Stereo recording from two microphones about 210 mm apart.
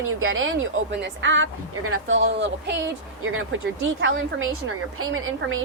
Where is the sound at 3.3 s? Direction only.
70° right (ahead or behind).